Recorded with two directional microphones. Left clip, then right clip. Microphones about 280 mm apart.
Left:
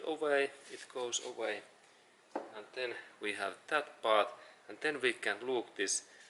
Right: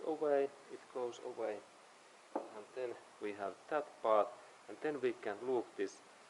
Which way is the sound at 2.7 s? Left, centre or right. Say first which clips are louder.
Left 4 dB; centre.